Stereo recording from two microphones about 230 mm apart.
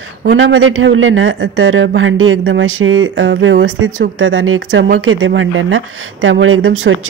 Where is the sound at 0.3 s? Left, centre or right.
Right.